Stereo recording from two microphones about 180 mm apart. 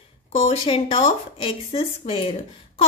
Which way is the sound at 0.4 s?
30° left (ahead or behind).